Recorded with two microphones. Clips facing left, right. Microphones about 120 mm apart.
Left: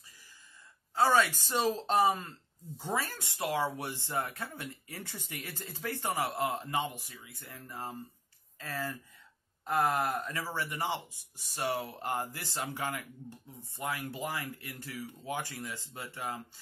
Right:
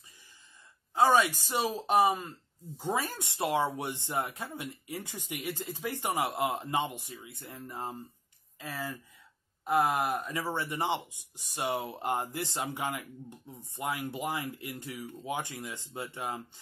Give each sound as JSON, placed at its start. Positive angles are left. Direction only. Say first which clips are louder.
{"t": 0.9, "sound": "speech", "louder": "right 2 dB", "side_deg": -15}